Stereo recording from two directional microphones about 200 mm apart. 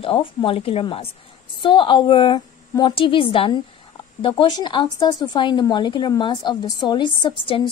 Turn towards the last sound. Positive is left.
turn(degrees=25)  # may be behind; listen again after turning